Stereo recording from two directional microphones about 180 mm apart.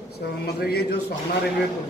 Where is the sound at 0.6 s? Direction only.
60° left (ahead or behind).